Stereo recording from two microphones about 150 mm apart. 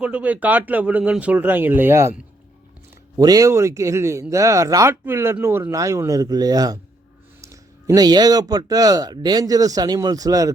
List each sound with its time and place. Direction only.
0.0 s speech: 10° right (ahead or behind)
3.2 s speech: 25° right (ahead or behind)